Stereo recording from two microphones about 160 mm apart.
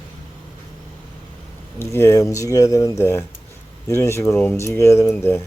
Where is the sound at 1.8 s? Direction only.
15° left (ahead or behind).